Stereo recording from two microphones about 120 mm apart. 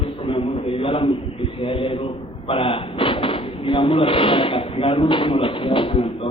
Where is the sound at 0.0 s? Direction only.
50° left (ahead or behind).